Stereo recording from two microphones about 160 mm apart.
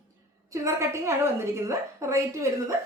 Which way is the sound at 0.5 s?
20° right (ahead or behind).